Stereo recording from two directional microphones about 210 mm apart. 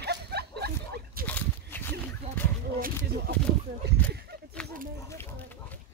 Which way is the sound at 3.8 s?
50° right (ahead or behind).